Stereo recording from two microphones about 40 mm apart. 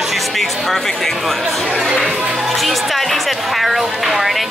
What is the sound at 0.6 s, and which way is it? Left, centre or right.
Music, centre.